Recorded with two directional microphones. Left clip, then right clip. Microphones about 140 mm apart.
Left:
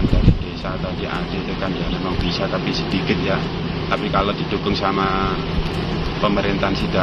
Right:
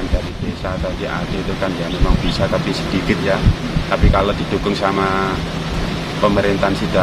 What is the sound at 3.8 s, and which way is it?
Speech, 40° right (ahead or behind).